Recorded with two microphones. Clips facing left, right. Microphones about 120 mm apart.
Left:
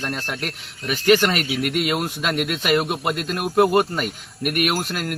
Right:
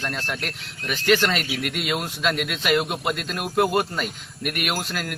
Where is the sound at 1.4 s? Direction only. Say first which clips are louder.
Left 5 dB; 50° left (ahead or behind).